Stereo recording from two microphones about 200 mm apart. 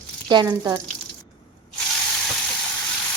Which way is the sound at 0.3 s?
20° right (ahead or behind).